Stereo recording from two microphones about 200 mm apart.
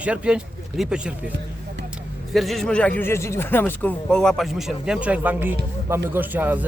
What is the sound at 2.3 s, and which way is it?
Speech, centre (ahead or behind).